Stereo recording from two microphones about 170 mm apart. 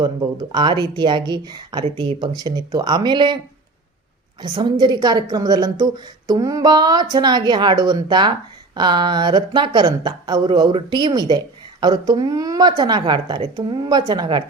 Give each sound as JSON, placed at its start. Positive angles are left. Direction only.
{"t": 0.0, "sound": "a woman's voice", "side_deg": -25}
{"t": 4.4, "sound": "a woman's voice", "side_deg": -25}